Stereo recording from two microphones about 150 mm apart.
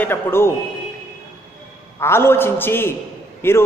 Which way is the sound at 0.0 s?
15° left (ahead or behind).